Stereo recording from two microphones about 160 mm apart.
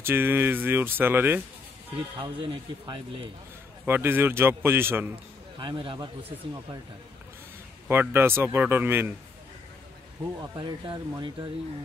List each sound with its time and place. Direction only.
0.0 s speech: 15° right (ahead or behind)
2.1 s a man's voice: 30° right (ahead or behind)
3.8 s speech: 10° right (ahead or behind)
5.6 s a man's voice: 30° right (ahead or behind)
6.2 s speech: 10° right (ahead or behind)
7.9 s speech: 15° right (ahead or behind)
10.5 s a man's voice: 30° right (ahead or behind)